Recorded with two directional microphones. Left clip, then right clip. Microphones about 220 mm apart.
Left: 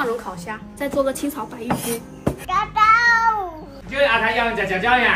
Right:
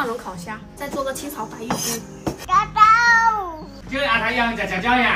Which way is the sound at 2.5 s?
10° right (ahead or behind).